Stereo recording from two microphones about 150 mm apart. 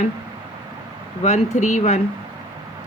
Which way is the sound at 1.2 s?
50° left (ahead or behind).